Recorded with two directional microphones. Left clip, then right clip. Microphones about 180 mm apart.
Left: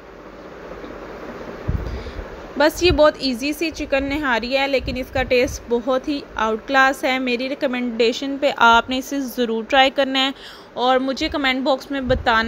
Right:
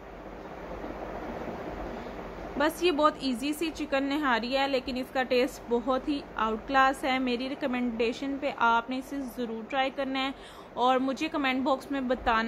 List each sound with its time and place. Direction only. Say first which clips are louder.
2.5 s a woman's voice: left 10 dB; 25° left (ahead or behind)
10.8 s a woman's voice: left 8 dB; 15° left (ahead or behind)